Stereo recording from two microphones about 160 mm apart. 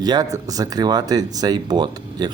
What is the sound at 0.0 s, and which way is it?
Speech, 25° right (ahead or behind).